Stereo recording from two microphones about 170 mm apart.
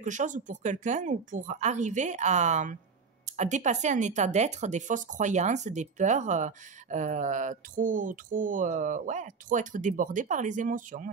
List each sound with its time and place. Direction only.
0.0 s speech: 45° right (ahead or behind)